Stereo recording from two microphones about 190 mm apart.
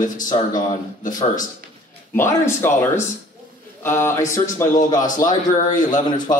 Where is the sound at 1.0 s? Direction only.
45° left (ahead or behind).